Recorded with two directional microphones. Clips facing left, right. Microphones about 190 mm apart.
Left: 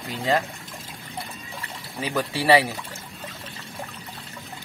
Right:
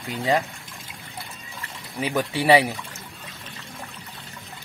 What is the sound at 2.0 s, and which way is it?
Speech, 20° right (ahead or behind).